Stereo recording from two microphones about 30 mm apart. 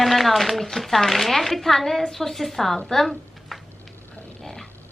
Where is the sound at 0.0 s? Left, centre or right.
Centre.